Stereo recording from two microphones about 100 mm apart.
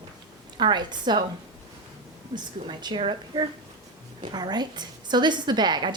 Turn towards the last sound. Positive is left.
turn(degrees=-50)  # may be behind; listen again after turning